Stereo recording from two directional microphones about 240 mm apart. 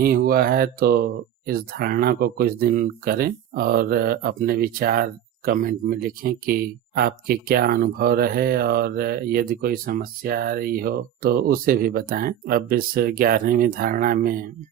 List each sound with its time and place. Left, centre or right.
0.0 s speech: right